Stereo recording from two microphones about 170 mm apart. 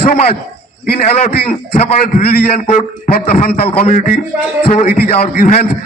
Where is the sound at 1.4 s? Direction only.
35° left (ahead or behind).